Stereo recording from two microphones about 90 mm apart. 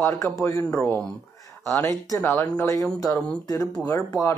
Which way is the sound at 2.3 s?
20° left (ahead or behind).